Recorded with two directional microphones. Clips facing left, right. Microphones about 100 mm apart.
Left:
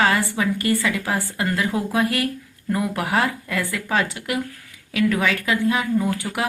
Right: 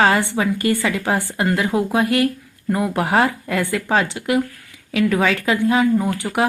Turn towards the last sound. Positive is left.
turn(degrees=-20)  # may be behind; listen again after turning